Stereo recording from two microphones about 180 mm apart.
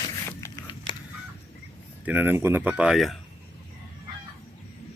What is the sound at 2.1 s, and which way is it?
Speech, 10° right (ahead or behind).